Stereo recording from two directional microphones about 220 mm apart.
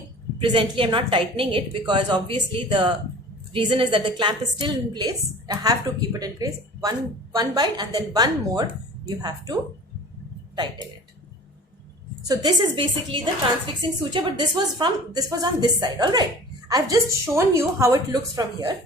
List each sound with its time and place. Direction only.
0.3 s a woman's voice: 25° right (ahead or behind)
12.3 s a woman's voice: 20° right (ahead or behind)